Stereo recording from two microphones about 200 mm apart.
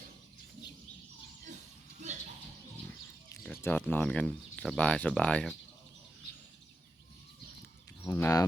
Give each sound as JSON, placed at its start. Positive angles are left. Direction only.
{"t": 2.0, "sound": "music", "side_deg": -35}
{"t": 3.4, "sound": "speech", "side_deg": 5}
{"t": 8.0, "sound": "speech", "side_deg": 15}